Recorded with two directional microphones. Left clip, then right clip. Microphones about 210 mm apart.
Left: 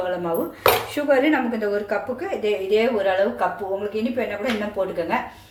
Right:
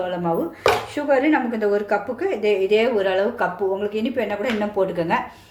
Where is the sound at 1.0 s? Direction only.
10° right (ahead or behind); by 4.1 s 35° right (ahead or behind).